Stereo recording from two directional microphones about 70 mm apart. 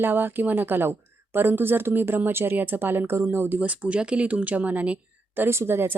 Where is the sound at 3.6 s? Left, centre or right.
Centre.